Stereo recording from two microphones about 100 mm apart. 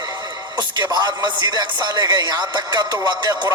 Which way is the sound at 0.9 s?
45° right (ahead or behind).